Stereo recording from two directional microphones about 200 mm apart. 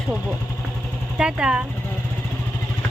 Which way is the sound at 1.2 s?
5° right (ahead or behind).